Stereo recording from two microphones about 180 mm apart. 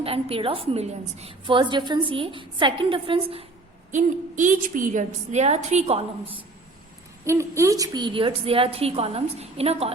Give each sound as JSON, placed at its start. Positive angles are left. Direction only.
{"t": 0.0, "sound": "a woman's voice", "side_deg": -35}
{"t": 3.9, "sound": "a woman's voice", "side_deg": -45}
{"t": 7.3, "sound": "a woman's voice", "side_deg": -15}